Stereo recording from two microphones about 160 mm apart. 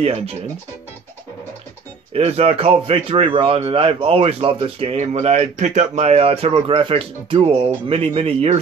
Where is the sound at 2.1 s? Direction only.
40° right (ahead or behind).